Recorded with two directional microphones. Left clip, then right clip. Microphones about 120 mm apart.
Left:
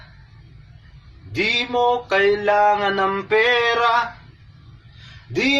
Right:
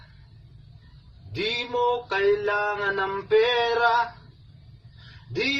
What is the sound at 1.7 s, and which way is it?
Mantra, 10° right (ahead or behind).